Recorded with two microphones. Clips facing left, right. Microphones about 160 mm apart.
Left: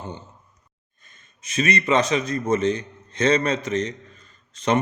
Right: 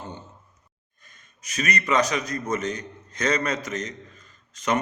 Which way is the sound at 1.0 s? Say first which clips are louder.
Even; 25° left (ahead or behind).